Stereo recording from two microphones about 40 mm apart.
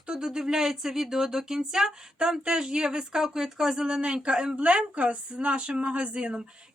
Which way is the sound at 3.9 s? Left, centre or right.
Right.